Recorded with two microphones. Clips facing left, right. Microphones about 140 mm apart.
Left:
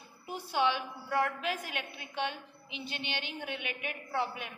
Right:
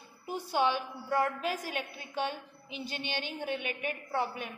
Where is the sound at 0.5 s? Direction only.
45° right (ahead or behind).